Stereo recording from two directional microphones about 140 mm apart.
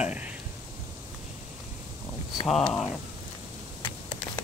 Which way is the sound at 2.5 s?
5° left (ahead or behind).